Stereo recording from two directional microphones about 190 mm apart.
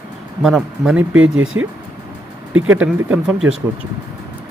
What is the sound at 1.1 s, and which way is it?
Speech, 90° right.